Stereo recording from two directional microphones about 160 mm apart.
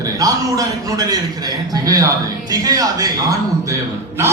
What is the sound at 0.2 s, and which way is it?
A man's voice, 20° right (ahead or behind).